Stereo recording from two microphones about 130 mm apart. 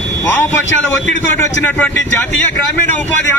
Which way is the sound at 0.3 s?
20° left (ahead or behind).